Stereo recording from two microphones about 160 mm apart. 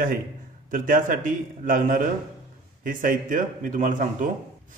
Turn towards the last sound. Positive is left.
turn(degrees=-55)  # may be behind; listen again after turning